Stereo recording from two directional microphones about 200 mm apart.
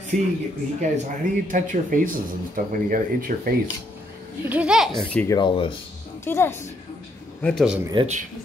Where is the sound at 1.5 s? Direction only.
40° right (ahead or behind).